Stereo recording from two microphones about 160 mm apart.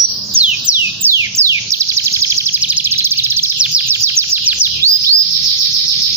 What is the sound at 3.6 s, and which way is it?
Bird, 10° right (ahead or behind).